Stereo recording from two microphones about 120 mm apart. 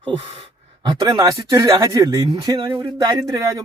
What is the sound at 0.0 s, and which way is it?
A man's voice, 50° right (ahead or behind).